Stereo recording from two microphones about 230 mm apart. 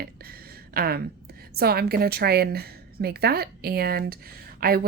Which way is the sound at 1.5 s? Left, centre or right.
Right.